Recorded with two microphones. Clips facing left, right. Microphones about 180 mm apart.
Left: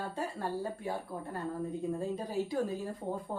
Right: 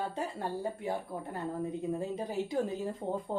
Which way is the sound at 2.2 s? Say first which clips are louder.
Right 1 dB; 20° right (ahead or behind).